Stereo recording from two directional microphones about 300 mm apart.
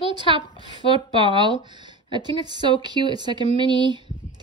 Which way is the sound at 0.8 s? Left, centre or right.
Centre.